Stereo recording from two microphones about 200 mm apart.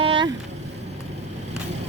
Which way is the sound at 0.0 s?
25° right (ahead or behind).